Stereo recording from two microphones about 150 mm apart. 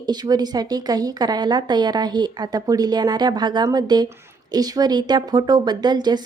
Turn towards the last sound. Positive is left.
turn(degrees=-30)  # may be behind; listen again after turning